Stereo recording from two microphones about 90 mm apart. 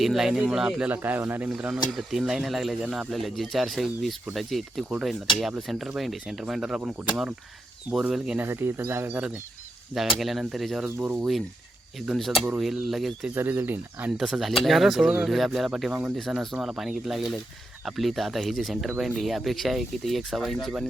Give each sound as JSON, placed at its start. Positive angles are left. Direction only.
{"t": 0.0, "sound": "speech", "side_deg": -5}
{"t": 0.9, "sound": "speech", "side_deg": -20}
{"t": 1.5, "sound": "speech", "side_deg": -10}
{"t": 8.4, "sound": "speech", "side_deg": -25}
{"t": 9.9, "sound": "speech", "side_deg": -5}
{"t": 13.3, "sound": "speech", "side_deg": -25}
{"t": 14.2, "sound": "speech", "side_deg": -5}